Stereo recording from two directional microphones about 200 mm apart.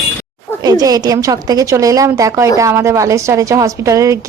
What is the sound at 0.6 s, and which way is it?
A woman's voice, 20° right (ahead or behind).